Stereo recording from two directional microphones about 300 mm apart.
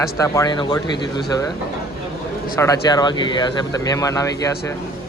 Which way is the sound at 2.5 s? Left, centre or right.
Centre.